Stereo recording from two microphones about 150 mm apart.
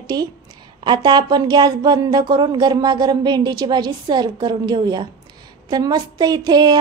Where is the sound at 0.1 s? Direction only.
25° right (ahead or behind).